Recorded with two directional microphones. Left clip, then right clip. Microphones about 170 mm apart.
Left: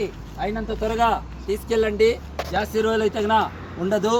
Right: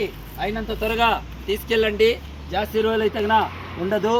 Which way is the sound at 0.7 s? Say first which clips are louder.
Right 1 dB; 5° left (ahead or behind).